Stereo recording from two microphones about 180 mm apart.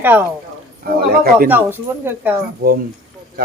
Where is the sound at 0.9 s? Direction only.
55° right (ahead or behind).